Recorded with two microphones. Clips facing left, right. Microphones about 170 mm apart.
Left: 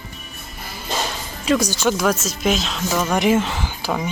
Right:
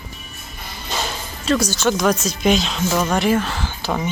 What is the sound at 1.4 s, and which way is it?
Speech, 15° left (ahead or behind).